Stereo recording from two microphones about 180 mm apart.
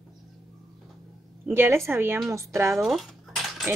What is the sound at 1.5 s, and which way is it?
A woman's voice, 15° right (ahead or behind).